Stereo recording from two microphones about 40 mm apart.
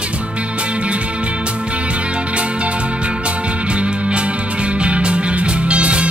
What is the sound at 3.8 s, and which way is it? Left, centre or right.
Music, right.